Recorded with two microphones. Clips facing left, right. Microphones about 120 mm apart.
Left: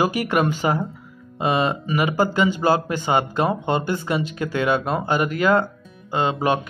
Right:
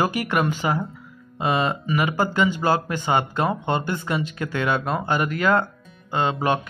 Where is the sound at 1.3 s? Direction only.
20° left (ahead or behind).